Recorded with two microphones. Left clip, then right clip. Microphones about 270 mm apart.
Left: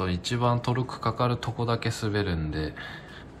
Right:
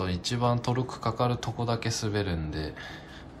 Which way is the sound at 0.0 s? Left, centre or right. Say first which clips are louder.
Left 2 dB; centre.